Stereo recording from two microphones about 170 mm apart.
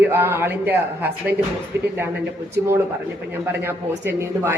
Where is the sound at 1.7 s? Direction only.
85° right.